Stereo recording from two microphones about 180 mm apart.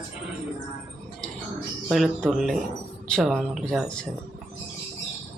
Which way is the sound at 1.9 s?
Centre (ahead or behind).